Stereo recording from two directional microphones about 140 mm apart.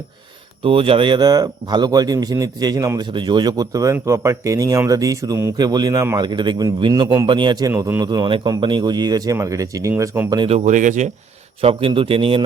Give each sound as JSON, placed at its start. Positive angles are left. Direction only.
{"t": 0.6, "sound": "speech", "side_deg": -40}
{"t": 10.5, "sound": "speech", "side_deg": -60}
{"t": 11.6, "sound": "a man's voice", "side_deg": -40}